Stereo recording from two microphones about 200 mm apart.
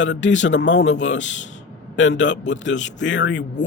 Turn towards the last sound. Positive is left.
turn(degrees=65)  # may be behind; listen again after turning